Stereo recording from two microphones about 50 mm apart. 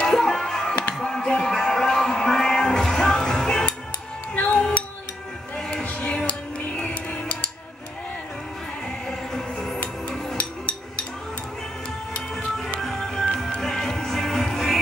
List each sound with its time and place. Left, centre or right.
0.0 s music: centre; by 7.5 s left
9.3 s music: centre
9.8 s music: left
12.4 s music: centre